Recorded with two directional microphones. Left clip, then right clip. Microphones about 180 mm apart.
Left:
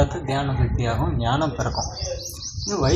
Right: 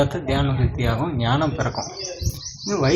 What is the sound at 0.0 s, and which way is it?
A man's voice, 15° right (ahead or behind).